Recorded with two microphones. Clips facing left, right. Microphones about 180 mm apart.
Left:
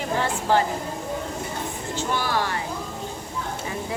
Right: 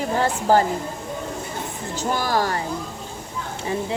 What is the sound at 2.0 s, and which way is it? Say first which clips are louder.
Speech: right 3 dB; 40° right (ahead or behind).